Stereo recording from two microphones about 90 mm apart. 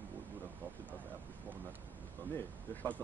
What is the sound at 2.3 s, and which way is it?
Speech, 20° left (ahead or behind).